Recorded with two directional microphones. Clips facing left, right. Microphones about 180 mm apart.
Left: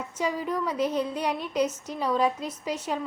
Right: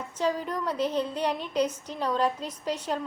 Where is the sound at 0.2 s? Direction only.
10° left (ahead or behind).